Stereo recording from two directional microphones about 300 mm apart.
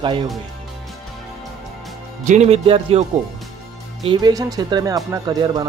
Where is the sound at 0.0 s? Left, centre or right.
Centre.